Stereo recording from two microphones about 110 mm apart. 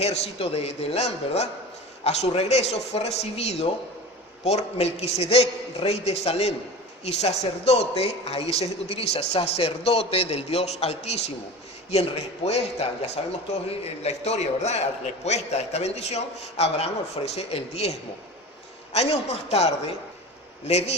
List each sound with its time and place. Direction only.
0.0 s a man's voice: 75° left (ahead or behind)
18.9 s a man's voice: 70° left (ahead or behind)